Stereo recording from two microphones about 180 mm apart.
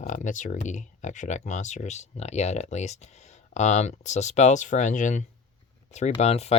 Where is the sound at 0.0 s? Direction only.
45° left (ahead or behind).